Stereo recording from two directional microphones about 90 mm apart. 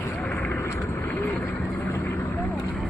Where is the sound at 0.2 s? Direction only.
15° left (ahead or behind).